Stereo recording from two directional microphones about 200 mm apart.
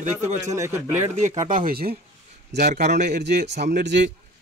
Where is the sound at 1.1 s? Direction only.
35° right (ahead or behind).